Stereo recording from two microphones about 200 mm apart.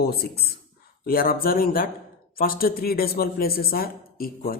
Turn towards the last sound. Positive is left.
turn(degrees=50)  # may be behind; listen again after turning